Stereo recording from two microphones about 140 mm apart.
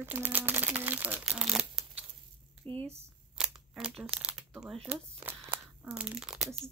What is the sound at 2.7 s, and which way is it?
Speech, 40° right (ahead or behind).